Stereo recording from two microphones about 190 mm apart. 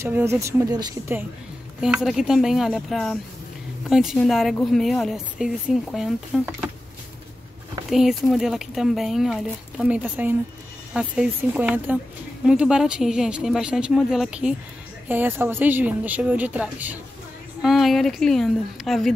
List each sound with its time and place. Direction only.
0.0 s speech: 15° right (ahead or behind)
1.8 s speech: 5° right (ahead or behind)
7.9 s speech: centre (ahead or behind)